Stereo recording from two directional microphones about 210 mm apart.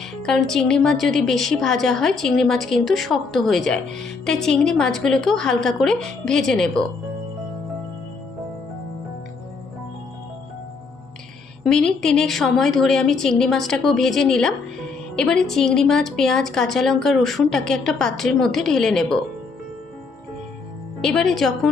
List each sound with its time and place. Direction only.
0.0 s a woman's voice: centre (ahead or behind)
11.6 s a woman's voice: 5° left (ahead or behind)
21.0 s a woman's voice: centre (ahead or behind)